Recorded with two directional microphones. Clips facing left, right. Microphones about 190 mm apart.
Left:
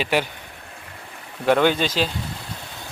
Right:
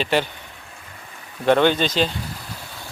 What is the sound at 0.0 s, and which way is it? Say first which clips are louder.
Speech: right 1 dB; 10° left (ahead or behind).